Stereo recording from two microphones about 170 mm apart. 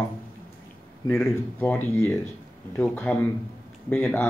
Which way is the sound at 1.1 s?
10° left (ahead or behind).